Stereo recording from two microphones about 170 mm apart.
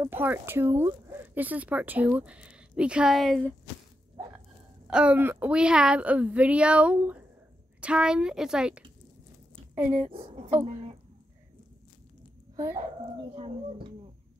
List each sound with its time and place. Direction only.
0.0 s speech: 10° right (ahead or behind)
4.8 s speech: 5° right (ahead or behind)
10.1 s speech: 35° right (ahead or behind)
13.3 s speech: 35° right (ahead or behind)